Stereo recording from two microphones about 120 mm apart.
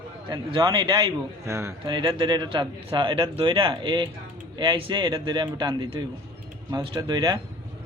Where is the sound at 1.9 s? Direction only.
40° right (ahead or behind).